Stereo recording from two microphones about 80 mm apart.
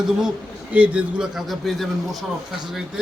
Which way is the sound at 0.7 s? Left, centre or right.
Centre.